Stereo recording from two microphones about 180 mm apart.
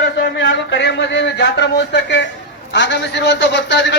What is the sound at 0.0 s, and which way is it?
A man's voice, 65° left (ahead or behind).